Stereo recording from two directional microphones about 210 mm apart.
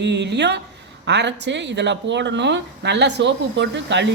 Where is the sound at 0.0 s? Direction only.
55° right (ahead or behind).